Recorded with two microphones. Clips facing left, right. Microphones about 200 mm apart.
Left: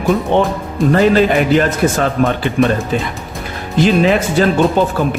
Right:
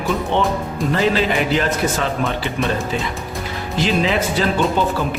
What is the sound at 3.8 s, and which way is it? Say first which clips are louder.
Speech: left 6 dB; 50° left (ahead or behind).